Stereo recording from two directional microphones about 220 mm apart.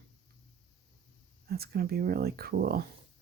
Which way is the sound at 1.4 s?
45° right (ahead or behind).